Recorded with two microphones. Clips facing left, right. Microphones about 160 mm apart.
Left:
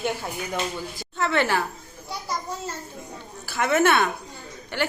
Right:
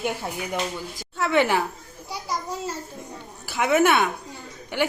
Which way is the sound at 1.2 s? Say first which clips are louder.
Right 2 dB; 10° right (ahead or behind).